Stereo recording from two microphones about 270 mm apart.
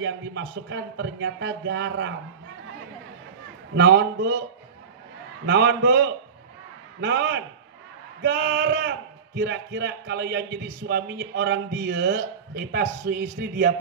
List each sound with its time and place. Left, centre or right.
0.0 s speech: right
3.7 s a man's voice: right
5.4 s a man's voice: right